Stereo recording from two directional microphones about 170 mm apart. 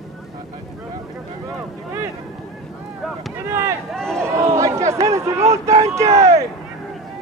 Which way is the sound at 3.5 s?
15° right (ahead or behind).